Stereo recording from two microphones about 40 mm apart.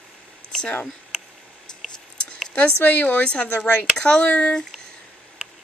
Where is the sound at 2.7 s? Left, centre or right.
Left.